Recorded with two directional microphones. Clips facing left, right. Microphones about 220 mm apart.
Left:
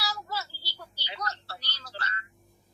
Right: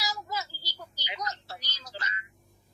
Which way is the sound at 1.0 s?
15° right (ahead or behind).